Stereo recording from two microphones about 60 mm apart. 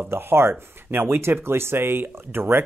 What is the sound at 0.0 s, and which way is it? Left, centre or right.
Speech, right.